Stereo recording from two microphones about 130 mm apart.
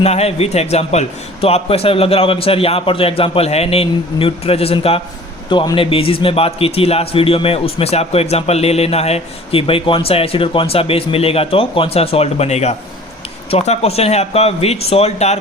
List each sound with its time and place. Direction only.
0.0 s a man's voice: 55° left (ahead or behind)